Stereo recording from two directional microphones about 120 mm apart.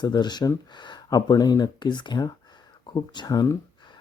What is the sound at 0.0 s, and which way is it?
Speech, 35° left (ahead or behind).